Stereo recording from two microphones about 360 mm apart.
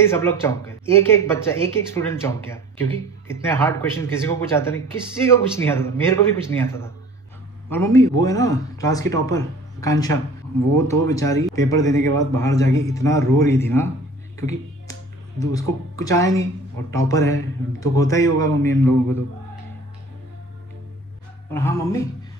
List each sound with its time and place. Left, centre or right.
0.0 s a woman's voice: centre
10.6 s speech: right
11.1 s a woman's voice: centre
14.4 s finger snapping: centre
15.5 s a woman's voice: centre
21.5 s a woman's voice: centre